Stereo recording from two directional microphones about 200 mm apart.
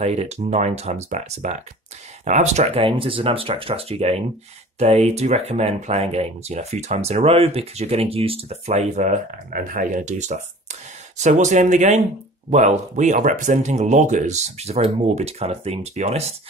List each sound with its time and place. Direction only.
0.0 s speech: 35° right (ahead or behind)